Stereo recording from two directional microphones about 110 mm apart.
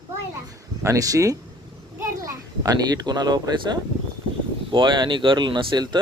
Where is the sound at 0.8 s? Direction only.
30° right (ahead or behind).